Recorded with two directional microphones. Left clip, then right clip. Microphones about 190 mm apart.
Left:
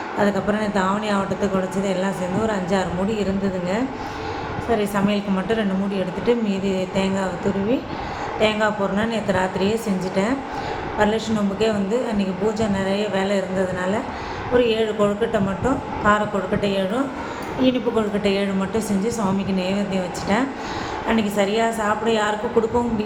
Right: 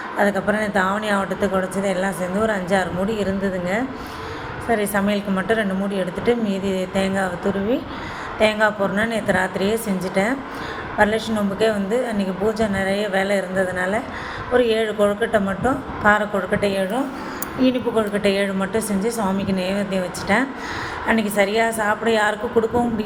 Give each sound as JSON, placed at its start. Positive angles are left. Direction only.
{"t": 0.2, "sound": "a woman's voice", "side_deg": -15}